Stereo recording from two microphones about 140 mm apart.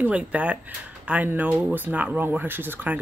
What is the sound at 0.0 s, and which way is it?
Speech, 10° right (ahead or behind).